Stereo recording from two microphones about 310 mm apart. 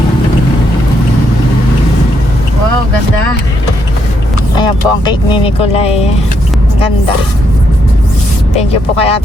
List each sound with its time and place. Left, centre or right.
4.5 s speech: centre
8.5 s speech: centre